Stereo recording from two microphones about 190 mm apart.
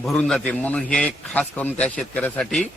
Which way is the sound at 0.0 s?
Centre (ahead or behind).